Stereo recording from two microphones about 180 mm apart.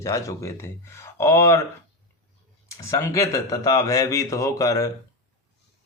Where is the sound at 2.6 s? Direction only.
15° left (ahead or behind).